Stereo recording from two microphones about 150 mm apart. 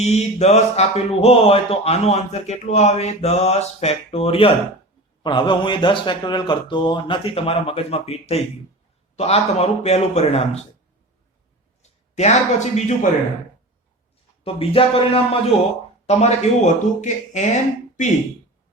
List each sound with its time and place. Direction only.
0.0 s a man's voice: 45° left (ahead or behind)
11.8 s speech: 50° left (ahead or behind)
14.4 s a man's voice: 40° left (ahead or behind)